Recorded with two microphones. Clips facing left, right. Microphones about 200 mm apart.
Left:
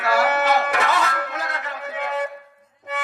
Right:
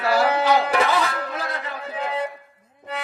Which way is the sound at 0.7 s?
30° right (ahead or behind).